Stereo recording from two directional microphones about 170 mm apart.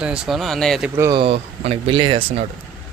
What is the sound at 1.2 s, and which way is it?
Speech, 35° right (ahead or behind).